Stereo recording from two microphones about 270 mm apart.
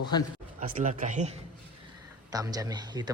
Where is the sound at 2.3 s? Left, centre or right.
Centre.